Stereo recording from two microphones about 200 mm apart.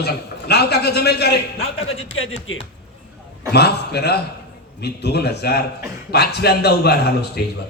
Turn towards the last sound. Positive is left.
turn(degrees=55)  # may be behind; listen again after turning